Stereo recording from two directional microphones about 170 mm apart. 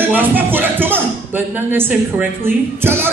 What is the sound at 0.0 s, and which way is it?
Speech, 10° right (ahead or behind).